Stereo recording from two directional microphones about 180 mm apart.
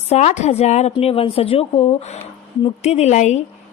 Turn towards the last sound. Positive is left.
turn(degrees=40)  # may be behind; listen again after turning